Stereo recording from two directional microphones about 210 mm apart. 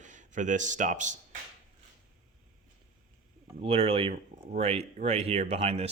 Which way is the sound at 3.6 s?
25° right (ahead or behind).